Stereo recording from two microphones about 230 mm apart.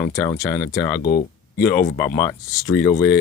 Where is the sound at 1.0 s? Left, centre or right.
Left.